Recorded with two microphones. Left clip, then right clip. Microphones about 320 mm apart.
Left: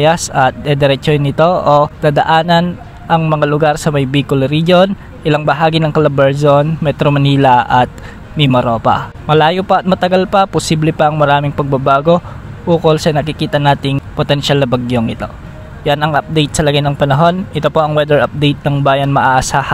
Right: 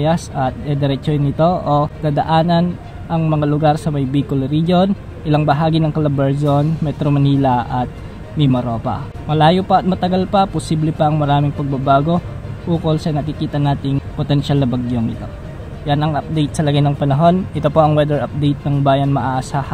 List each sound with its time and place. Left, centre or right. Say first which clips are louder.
0.0 s speech: left 8 dB; left